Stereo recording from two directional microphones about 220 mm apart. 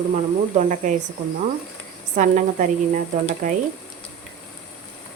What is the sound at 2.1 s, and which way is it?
A woman's voice, 35° right (ahead or behind).